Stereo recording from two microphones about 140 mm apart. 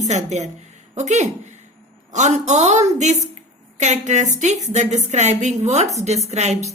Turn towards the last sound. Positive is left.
turn(degrees=-50)  # may be behind; listen again after turning